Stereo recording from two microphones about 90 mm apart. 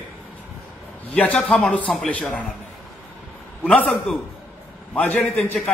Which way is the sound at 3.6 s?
15° left (ahead or behind).